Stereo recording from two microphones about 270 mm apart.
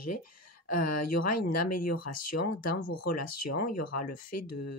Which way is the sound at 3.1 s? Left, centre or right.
Left.